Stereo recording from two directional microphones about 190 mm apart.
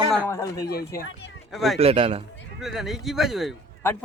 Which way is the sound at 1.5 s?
Centre (ahead or behind).